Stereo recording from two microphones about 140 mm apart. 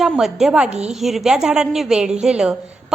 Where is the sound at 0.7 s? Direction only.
50° right (ahead or behind).